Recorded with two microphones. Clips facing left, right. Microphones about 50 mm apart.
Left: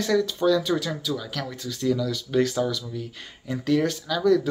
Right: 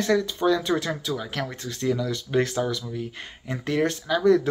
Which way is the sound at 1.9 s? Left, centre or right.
Right.